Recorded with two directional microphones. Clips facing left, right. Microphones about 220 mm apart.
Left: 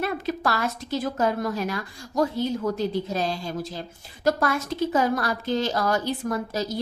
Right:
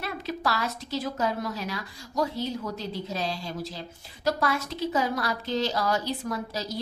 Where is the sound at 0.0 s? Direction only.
50° left (ahead or behind).